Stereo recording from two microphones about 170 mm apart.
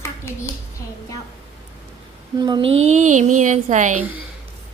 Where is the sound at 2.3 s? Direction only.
25° right (ahead or behind).